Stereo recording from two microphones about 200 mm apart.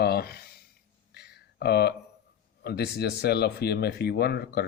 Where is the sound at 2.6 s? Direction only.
55° left (ahead or behind).